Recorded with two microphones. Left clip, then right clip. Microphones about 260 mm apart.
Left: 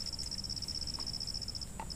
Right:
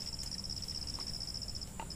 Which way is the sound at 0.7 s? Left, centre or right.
Left.